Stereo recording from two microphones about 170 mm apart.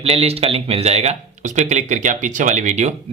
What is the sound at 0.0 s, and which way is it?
Speech, 35° right (ahead or behind).